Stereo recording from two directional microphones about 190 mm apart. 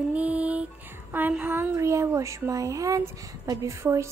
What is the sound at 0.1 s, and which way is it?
Music, 10° right (ahead or behind).